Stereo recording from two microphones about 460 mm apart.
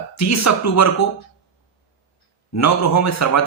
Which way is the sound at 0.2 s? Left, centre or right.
Left.